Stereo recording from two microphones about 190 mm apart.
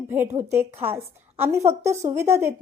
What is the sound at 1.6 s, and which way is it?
Speech, 35° right (ahead or behind).